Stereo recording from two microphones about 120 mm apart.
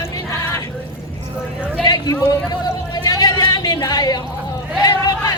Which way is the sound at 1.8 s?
35° left (ahead or behind).